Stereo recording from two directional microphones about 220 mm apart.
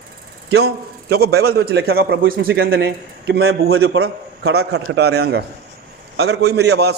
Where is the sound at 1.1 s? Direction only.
45° right (ahead or behind).